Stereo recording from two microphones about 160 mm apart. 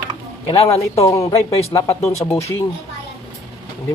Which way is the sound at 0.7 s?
20° left (ahead or behind).